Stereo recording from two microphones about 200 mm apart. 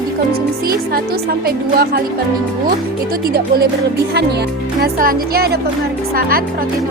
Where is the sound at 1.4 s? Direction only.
50° right (ahead or behind).